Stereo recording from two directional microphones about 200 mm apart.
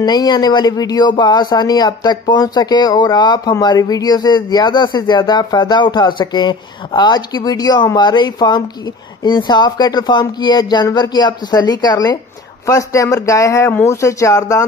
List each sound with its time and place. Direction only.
0.0 s speech: 20° left (ahead or behind)